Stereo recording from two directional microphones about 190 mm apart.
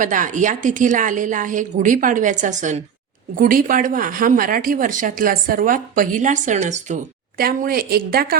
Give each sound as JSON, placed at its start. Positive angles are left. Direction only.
{"t": 0.0, "sound": "speech", "side_deg": -40}